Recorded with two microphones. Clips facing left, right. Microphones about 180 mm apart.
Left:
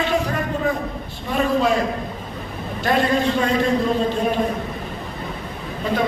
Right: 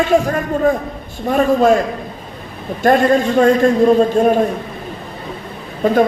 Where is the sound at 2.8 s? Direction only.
45° right (ahead or behind).